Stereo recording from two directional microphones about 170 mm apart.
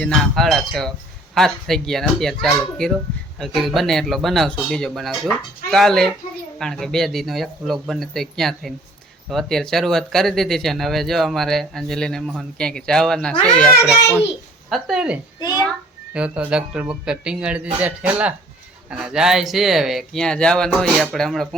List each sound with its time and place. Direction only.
0.0 s speech: 5° left (ahead or behind)
14.7 s speech: 5° right (ahead or behind)
15.4 s a child's voice: 25° left (ahead or behind)
16.1 s speech: 5° right (ahead or behind)